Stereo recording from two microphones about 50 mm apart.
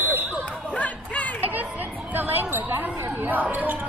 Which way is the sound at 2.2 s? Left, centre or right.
Right.